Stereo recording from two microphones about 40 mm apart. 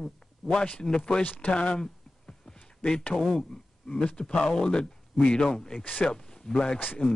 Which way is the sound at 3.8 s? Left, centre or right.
Left.